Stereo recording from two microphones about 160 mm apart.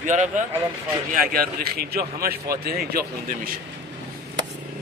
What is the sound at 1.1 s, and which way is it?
Speech, 65° right (ahead or behind).